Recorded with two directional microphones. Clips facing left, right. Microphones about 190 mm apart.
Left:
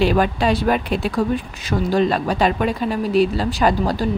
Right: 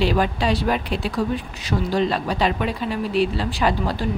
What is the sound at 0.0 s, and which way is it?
Speech, 50° left (ahead or behind).